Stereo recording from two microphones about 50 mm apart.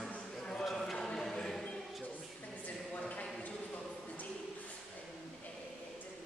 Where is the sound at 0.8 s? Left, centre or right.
Centre.